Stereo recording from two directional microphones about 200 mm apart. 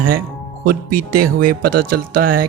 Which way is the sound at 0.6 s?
50° right (ahead or behind).